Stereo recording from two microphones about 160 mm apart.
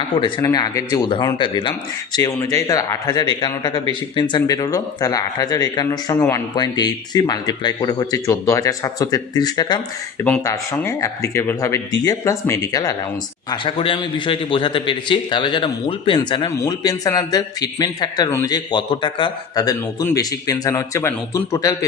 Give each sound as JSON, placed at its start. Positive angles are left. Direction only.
{"t": 0.2, "sound": "a man's voice", "side_deg": 30}
{"t": 10.2, "sound": "a man's voice", "side_deg": 15}
{"t": 13.5, "sound": "a man's voice", "side_deg": 35}